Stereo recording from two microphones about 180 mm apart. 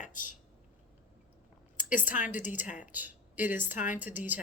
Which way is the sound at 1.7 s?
45° left (ahead or behind).